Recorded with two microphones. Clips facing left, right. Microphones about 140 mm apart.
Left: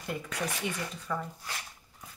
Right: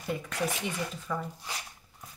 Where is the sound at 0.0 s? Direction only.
Centre (ahead or behind).